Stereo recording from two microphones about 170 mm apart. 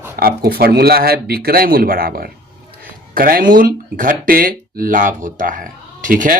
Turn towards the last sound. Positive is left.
turn(degrees=-50)  # may be behind; listen again after turning